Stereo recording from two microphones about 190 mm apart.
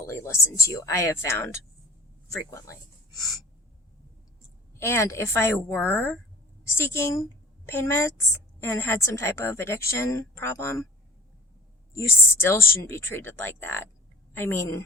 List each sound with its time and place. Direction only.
0.0 s a woman's voice: 15° left (ahead or behind)
4.8 s a woman's voice: 15° left (ahead or behind)
11.9 s a woman's voice: 15° left (ahead or behind)